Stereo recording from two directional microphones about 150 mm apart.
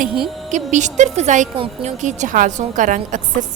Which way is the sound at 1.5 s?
40° right (ahead or behind).